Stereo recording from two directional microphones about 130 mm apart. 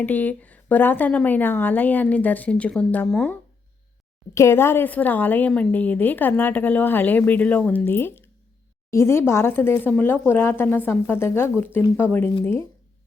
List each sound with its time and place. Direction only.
0.0 s a woman's voice: 15° left (ahead or behind)
4.4 s a woman's voice: 20° left (ahead or behind)